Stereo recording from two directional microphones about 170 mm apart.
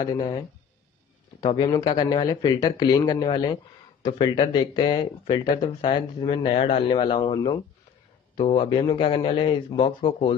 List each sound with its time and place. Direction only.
0.0 s a man's voice: 25° left (ahead or behind)